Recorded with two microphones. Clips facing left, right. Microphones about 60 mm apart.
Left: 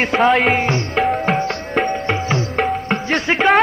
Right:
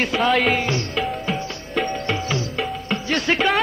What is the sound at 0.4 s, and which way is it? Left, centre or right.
Music, left.